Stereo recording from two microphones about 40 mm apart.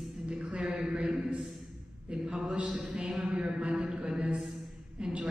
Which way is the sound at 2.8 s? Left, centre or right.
Right.